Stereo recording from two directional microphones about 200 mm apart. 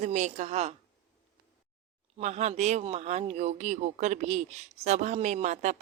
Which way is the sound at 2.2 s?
35° right (ahead or behind).